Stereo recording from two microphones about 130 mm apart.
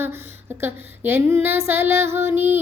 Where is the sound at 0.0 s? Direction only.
15° right (ahead or behind).